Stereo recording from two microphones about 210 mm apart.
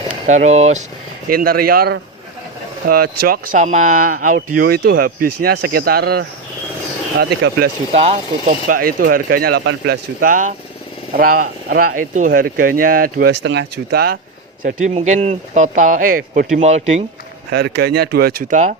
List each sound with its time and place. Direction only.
0.1 s speech: 35° right (ahead or behind)
1.3 s speech: 45° right (ahead or behind)
7.9 s speech: 30° right (ahead or behind)
13.4 s speech: 55° right (ahead or behind)
14.6 s speech: 35° right (ahead or behind)
17.5 s speech: 50° right (ahead or behind)